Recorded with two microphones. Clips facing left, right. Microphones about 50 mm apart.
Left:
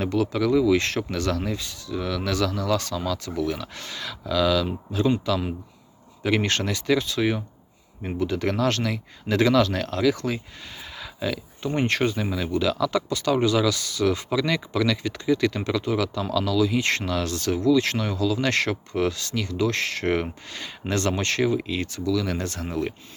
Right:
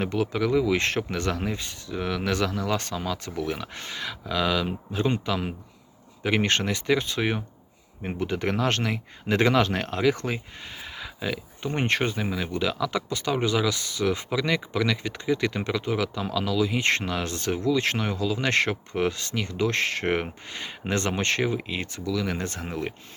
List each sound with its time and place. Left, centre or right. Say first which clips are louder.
0.1 s speech: left 5 dB; right
6.2 s speech: even; right
10.8 s speech: left 2 dB; centre
12.1 s speech: left 3 dB; centre